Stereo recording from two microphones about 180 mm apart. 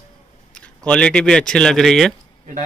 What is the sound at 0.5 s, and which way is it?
Speech, 5° left (ahead or behind).